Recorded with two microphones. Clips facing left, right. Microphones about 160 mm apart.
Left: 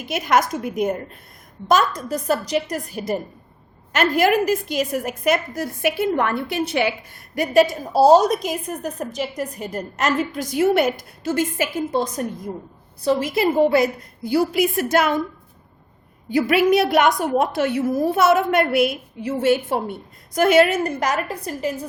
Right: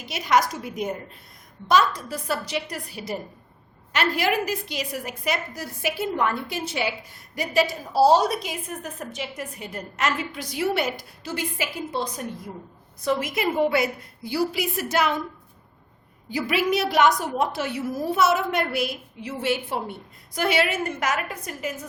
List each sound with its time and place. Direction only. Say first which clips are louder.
0.0 s a woman's voice: left 2 dB; 55° left (ahead or behind)
1.6 s a woman's voice: left 2 dB; 45° left (ahead or behind)
13.0 s a woman's voice: left 5 dB; 30° left (ahead or behind); by 15.1 s 50° left (ahead or behind)
16.3 s a woman's voice: left 7 dB; 55° left (ahead or behind); by 21.8 s 35° left (ahead or behind)